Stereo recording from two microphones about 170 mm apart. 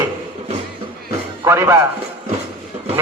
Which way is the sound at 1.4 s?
15° right (ahead or behind).